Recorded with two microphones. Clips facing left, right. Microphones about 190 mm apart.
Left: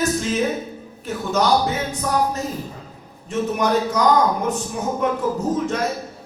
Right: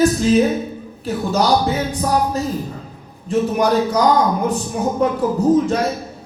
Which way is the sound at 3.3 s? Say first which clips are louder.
Right 4 dB; 35° right (ahead or behind).